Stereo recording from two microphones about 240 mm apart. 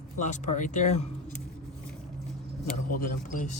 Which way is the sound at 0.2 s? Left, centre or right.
Left.